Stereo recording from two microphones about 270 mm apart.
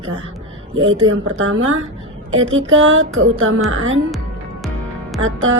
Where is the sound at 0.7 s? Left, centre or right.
Right.